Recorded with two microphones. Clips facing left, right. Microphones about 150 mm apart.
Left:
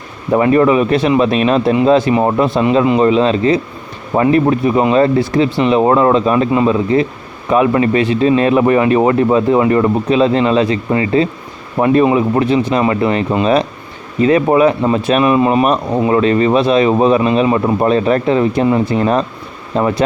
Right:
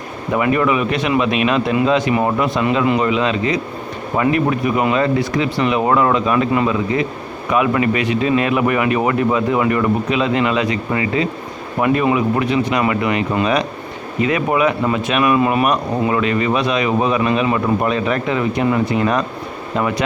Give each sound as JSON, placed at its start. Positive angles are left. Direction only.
{"t": 0.3, "sound": "speech", "side_deg": 30}